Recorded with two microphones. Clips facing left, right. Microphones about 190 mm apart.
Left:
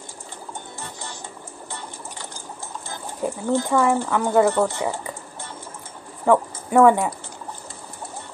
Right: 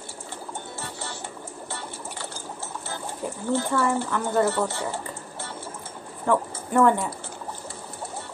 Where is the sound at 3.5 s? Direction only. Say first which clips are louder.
Left 4 dB; 15° left (ahead or behind).